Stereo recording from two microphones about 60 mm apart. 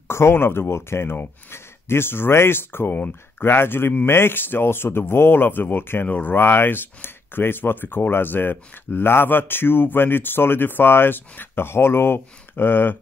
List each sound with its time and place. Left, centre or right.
0.1 s speech: left